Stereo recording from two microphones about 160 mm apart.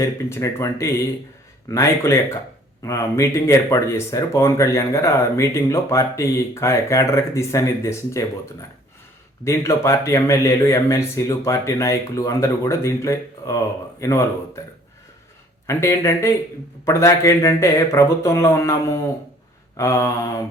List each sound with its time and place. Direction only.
0.0 s speech: 20° left (ahead or behind)
9.4 s speech: 15° left (ahead or behind)
15.6 s speech: 15° left (ahead or behind)